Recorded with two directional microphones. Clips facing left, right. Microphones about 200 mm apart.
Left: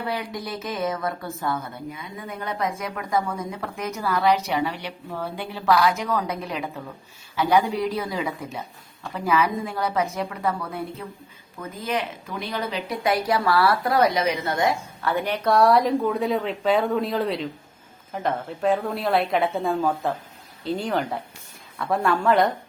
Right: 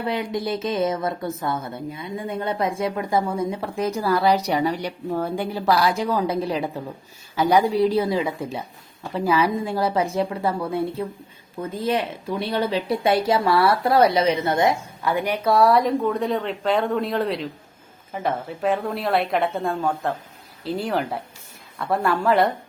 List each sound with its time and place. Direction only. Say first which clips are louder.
0.0 s a woman's voice: right 4 dB; 20° right (ahead or behind); by 22.5 s 5° right (ahead or behind)